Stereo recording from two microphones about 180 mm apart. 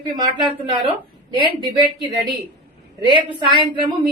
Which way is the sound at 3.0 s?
25° right (ahead or behind).